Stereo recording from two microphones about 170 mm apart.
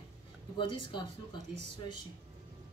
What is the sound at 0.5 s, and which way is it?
Speech, 30° left (ahead or behind).